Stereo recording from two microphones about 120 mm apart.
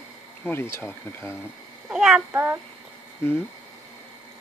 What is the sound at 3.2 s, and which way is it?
Speech, 20° left (ahead or behind).